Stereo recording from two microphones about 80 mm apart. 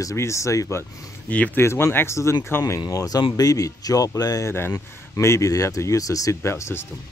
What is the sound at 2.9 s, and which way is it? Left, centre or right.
Speech, left.